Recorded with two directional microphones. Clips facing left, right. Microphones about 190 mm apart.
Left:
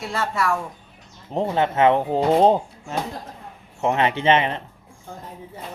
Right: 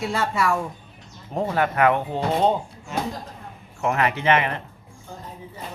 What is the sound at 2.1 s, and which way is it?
Speech, 35° left (ahead or behind).